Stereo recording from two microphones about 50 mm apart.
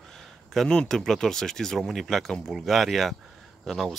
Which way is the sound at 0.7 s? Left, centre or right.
Centre.